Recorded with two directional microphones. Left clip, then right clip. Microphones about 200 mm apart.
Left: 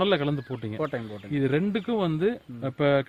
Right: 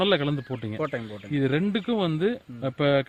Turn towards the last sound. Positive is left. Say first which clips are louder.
# even
turn(degrees=-50)  # may be behind; listen again after turning